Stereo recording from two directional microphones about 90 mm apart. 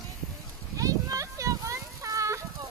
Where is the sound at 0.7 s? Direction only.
40° right (ahead or behind).